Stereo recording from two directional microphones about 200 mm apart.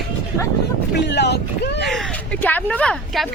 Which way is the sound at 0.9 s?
60° left (ahead or behind).